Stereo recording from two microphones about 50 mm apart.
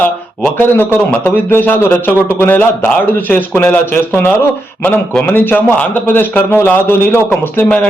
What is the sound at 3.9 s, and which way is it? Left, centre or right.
A man's voice, left.